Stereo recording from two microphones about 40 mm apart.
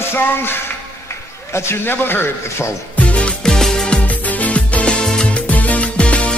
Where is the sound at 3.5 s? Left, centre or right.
Centre.